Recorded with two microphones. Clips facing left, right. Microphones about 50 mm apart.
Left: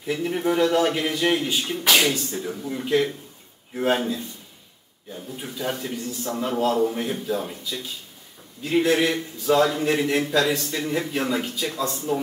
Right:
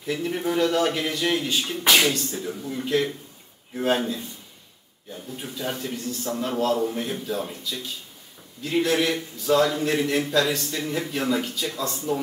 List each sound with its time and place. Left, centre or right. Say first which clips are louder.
0.0 s a man's voice: left 2 dB; centre
1.9 s a man's voice: even; centre
2.1 s a man's voice: left 1 dB; centre